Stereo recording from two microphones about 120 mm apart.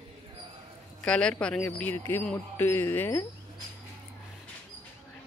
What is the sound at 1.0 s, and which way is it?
Speech, 5° left (ahead or behind).